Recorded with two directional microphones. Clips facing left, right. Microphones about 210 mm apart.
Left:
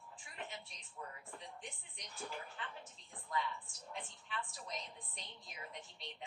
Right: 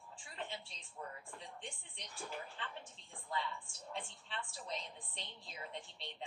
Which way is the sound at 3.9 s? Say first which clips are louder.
Even; 30° right (ahead or behind).